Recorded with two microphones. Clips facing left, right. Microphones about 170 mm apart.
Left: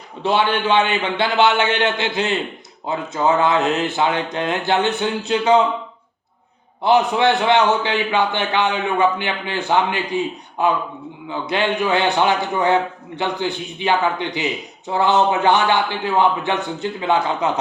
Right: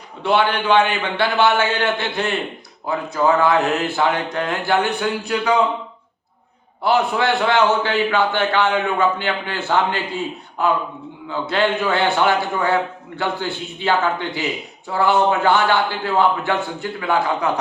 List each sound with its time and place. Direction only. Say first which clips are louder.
0.2 s speech: even; 20° left (ahead or behind)
6.8 s a man's voice: left 2 dB; 20° left (ahead or behind)